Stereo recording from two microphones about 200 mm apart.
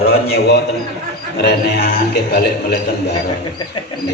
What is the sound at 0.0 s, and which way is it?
A man's voice, 50° left (ahead or behind).